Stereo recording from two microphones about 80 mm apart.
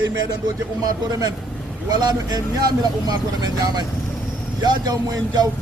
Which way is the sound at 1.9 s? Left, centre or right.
Right.